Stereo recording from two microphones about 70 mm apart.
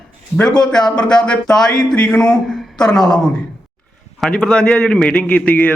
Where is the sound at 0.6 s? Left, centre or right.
Centre.